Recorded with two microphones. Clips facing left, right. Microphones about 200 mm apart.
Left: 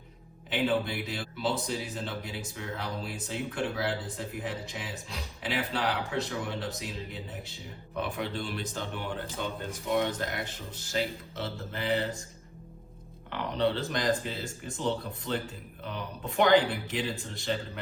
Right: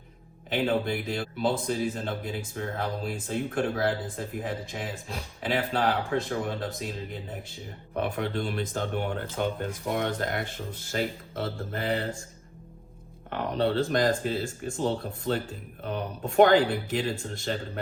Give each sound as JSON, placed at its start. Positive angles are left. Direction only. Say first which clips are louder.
{"t": 0.5, "sound": "speech", "louder": "right 2 dB", "side_deg": -45}
{"t": 13.3, "sound": "speech", "louder": "right 3 dB", "side_deg": -45}